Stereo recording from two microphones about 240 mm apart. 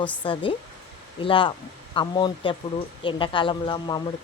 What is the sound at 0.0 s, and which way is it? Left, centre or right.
Speech, centre.